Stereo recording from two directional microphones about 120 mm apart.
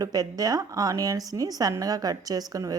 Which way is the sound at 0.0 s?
30° right (ahead or behind).